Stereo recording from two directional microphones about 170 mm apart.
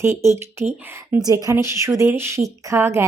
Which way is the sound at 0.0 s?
15° right (ahead or behind).